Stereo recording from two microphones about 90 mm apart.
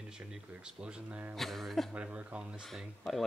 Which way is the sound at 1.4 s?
Centre (ahead or behind).